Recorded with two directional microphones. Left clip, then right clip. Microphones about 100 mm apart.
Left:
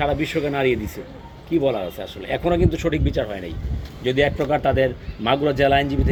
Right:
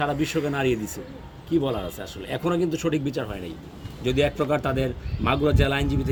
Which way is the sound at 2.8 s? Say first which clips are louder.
Left 3 dB; 50° right (ahead or behind).